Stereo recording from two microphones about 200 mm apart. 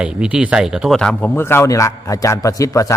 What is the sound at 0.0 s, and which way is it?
A man's voice, 5° right (ahead or behind).